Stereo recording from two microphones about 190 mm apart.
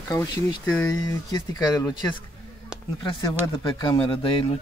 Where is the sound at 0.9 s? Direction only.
20° left (ahead or behind).